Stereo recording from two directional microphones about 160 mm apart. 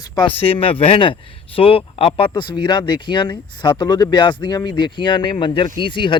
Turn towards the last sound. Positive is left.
turn(degrees=30)  # may be behind; listen again after turning